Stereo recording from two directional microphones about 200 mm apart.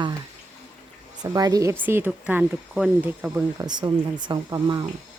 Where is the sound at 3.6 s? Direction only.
20° right (ahead or behind).